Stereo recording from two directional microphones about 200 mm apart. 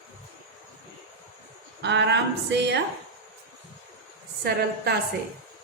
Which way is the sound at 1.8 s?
60° right (ahead or behind).